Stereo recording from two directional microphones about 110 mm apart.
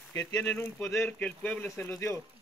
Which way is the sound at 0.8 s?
25° left (ahead or behind).